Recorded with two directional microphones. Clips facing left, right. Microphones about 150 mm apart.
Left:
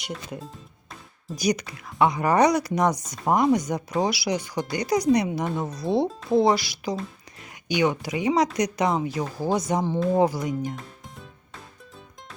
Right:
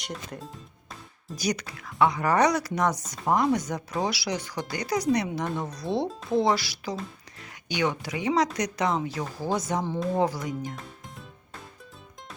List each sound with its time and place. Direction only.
0.0 s speech: centre (ahead or behind)
1.4 s speech: 15° left (ahead or behind)
10.5 s music: centre (ahead or behind)